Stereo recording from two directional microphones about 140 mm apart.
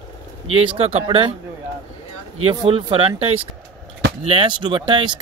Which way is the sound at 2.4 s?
35° right (ahead or behind).